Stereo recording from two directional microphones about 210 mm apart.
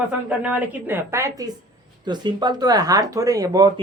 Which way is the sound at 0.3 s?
5° right (ahead or behind).